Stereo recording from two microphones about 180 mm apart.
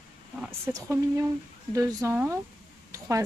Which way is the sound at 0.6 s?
15° right (ahead or behind).